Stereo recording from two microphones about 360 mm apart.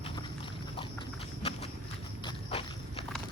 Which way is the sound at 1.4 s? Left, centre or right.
Centre.